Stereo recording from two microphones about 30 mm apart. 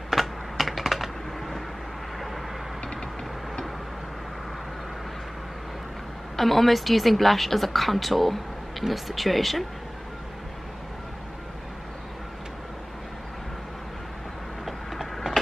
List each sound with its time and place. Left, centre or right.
0.1 s computer keyboard: centre
6.3 s a woman's voice: centre